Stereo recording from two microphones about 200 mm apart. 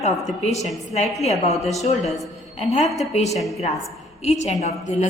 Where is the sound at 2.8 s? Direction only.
Centre (ahead or behind).